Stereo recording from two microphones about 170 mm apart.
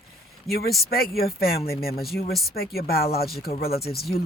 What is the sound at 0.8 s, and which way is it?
Speech, 65° left (ahead or behind).